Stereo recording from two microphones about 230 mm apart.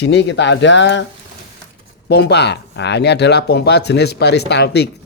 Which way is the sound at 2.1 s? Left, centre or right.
Left.